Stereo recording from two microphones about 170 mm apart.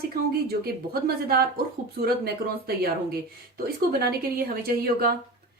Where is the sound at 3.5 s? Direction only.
65° right (ahead or behind).